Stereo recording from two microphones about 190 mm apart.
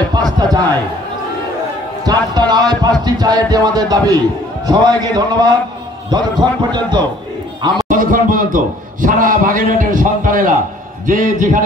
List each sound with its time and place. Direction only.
0.1 s a sound: 20° right (ahead or behind)
2.0 s speech: 20° right (ahead or behind)
7.9 s a man's voice: 45° right (ahead or behind)